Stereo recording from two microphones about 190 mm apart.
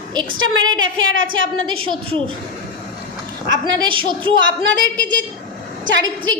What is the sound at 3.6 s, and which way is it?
Speech, 25° right (ahead or behind).